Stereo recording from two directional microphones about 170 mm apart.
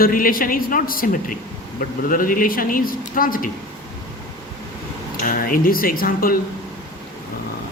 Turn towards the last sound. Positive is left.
turn(degrees=60)  # may be behind; listen again after turning